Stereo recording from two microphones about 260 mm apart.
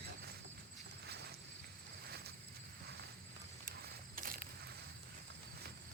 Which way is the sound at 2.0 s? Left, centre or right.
Right.